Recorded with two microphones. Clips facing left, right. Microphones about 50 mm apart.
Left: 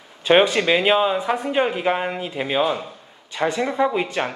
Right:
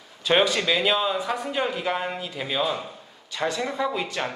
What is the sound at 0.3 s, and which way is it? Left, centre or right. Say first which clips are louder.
Speech: left 5 dB; left.